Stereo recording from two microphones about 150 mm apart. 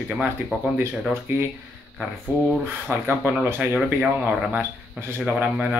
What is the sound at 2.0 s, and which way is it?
Speech, centre (ahead or behind).